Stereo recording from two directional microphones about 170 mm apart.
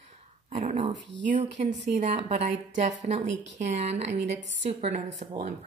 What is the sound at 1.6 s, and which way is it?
A woman's voice, 40° right (ahead or behind).